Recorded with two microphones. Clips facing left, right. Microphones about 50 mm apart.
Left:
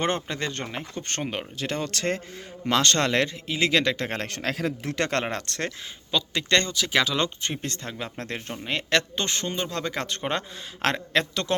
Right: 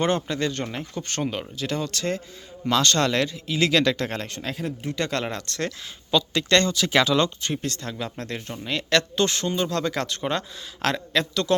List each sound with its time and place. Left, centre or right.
0.3 s speech: left
0.9 s speech: left
3.5 s speech: left
4.3 s speech: left
4.9 s speech: left
5.2 s speech: left
6.1 s speech: centre
6.7 s speech: centre
7.2 s speech: left